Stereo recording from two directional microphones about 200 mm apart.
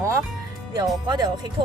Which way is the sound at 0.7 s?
20° right (ahead or behind).